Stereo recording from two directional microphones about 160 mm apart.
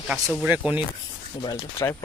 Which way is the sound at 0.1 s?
Centre (ahead or behind).